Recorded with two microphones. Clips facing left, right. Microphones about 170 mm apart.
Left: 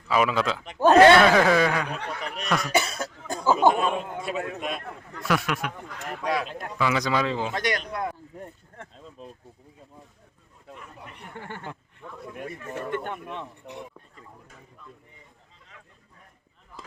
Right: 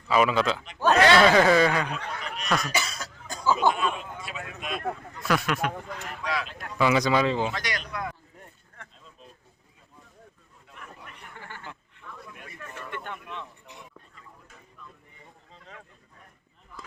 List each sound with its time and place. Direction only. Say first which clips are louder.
0.1 s speech: right 1 dB; 5° left (ahead or behind)
0.6 s speech: left 8 dB; 50° left (ahead or behind)
1.2 s speech: even; centre (ahead or behind)
2.5 s cough: even; 10° left (ahead or behind)
2.7 s speech: left 6 dB; 55° left (ahead or behind); by 4.8 s 40° left (ahead or behind)
5.3 s speech: even; 5° left (ahead or behind)
6.0 s speech: left 7 dB; 50° left (ahead or behind)
6.5 s speech: left 5 dB; 25° left (ahead or behind)
6.7 s speech: right 3 dB; 15° right (ahead or behind)
7.0 s speech: right 2 dB; centre (ahead or behind)
7.5 s speech: left 5 dB; 50° left (ahead or behind)
8.0 s a sound: left 5 dB; 35° left (ahead or behind)
11.5 s speech: left 5 dB; 50° left (ahead or behind)
12.3 s speech: left 13 dB; 40° left (ahead or behind)